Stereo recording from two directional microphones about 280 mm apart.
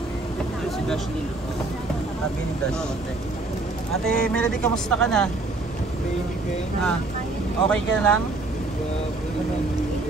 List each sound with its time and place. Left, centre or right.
4.0 s speech: centre
7.6 s speech: centre